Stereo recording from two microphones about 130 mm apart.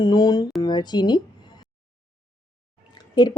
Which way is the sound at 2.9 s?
35° left (ahead or behind).